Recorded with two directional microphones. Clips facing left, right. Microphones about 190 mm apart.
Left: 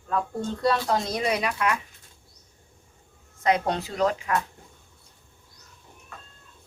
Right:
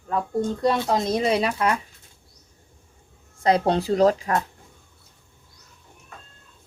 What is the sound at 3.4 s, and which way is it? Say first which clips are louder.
Speech: right 4 dB; 35° right (ahead or behind).